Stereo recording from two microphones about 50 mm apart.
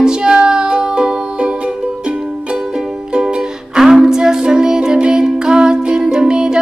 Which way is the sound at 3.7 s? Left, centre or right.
Centre.